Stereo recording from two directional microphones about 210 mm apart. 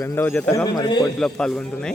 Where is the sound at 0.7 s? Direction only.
20° left (ahead or behind).